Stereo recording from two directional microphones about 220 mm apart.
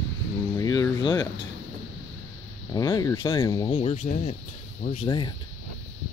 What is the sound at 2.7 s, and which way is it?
Speech, 15° left (ahead or behind).